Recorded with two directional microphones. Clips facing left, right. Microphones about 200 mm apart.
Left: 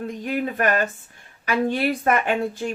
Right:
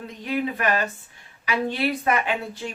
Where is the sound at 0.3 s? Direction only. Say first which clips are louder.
Left 1 dB; 45° left (ahead or behind).